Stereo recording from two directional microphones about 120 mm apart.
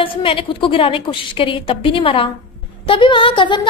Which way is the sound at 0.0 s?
45° left (ahead or behind).